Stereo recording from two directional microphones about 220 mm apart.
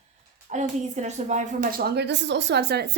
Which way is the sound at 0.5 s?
30° right (ahead or behind).